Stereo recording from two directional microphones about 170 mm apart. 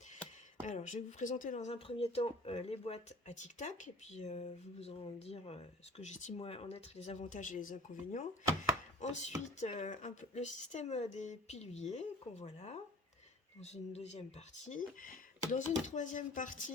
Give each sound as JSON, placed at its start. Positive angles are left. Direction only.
{"t": 0.7, "sound": "speech", "side_deg": 45}
{"t": 6.4, "sound": "speech", "side_deg": 35}